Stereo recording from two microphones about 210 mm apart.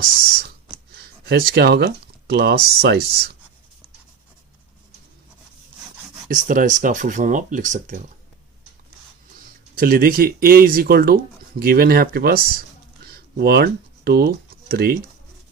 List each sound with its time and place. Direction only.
1.2 s speech: 50° right (ahead or behind)
6.2 s speech: 40° right (ahead or behind)
9.4 s speech: 45° right (ahead or behind)
13.1 s a sound: 45° right (ahead or behind)